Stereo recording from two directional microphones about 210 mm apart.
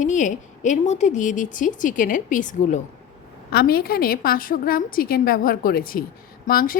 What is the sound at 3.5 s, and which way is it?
A woman's voice, 50° left (ahead or behind).